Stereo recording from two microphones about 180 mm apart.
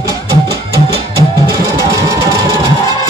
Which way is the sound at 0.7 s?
30° right (ahead or behind).